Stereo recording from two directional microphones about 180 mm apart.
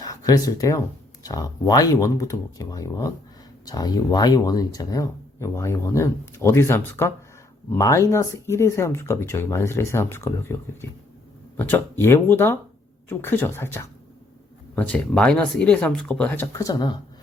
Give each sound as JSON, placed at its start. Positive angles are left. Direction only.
{"t": 0.0, "sound": "speech", "side_deg": 20}